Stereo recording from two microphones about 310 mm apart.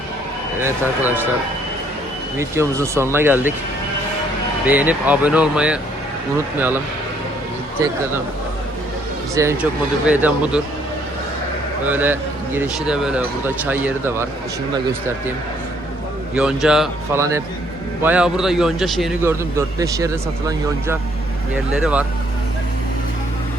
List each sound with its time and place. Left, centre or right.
0.6 s speech: centre
2.4 s speech: centre
4.7 s a man's voice: centre
9.3 s a man's voice: centre
11.9 s a man's voice: centre
16.3 s a man's voice: centre